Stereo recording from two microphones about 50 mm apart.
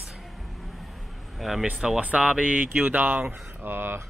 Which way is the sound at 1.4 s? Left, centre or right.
Centre.